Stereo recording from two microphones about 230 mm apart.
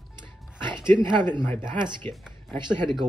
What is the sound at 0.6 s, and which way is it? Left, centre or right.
Speech, centre.